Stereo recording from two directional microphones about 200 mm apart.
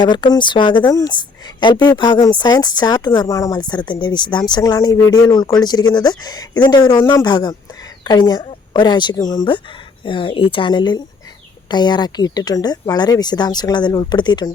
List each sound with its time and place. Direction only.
0.0 s a woman's voice: 20° left (ahead or behind)